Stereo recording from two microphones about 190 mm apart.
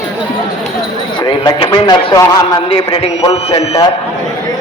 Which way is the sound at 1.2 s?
25° left (ahead or behind).